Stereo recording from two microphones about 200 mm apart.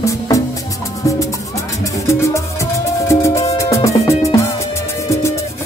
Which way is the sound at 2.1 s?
15° left (ahead or behind).